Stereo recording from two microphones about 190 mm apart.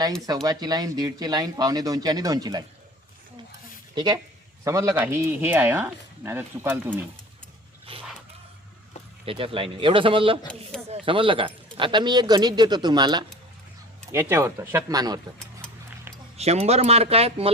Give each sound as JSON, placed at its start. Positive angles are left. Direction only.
{"t": 0.4, "sound": "speech", "side_deg": -20}
{"t": 3.9, "sound": "speech", "side_deg": -25}
{"t": 7.9, "sound": "dog", "side_deg": -30}
{"t": 9.2, "sound": "speech", "side_deg": -30}
{"t": 16.4, "sound": "speech", "side_deg": -35}